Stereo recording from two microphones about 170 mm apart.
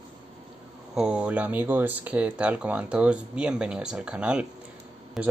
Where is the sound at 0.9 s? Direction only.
5° right (ahead or behind).